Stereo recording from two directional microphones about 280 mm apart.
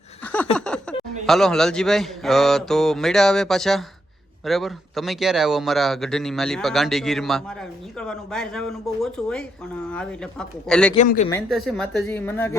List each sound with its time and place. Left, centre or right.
0.3 s a sound: centre
1.3 s speech: centre
10.9 s speech: left
11.3 s speech: centre